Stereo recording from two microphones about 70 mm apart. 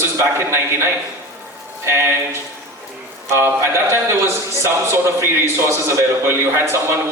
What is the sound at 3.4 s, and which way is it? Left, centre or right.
A man's voice, right.